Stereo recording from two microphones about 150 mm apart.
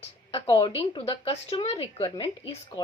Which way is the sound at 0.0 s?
40° left (ahead or behind).